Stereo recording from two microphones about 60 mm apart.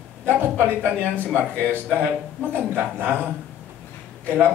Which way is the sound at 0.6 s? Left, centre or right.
Right.